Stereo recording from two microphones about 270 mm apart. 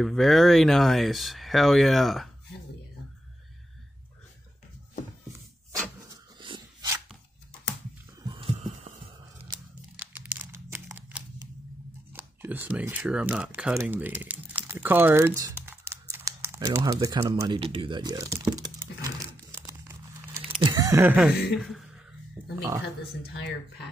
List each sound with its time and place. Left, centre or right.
0.0 s speech: centre
6.4 s dog: centre
8.3 s heart sounds: centre
9.9 s a sound: centre
20.6 s speech: centre
22.4 s music: centre